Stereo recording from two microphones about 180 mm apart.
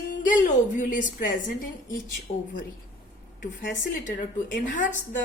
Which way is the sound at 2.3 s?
40° left (ahead or behind).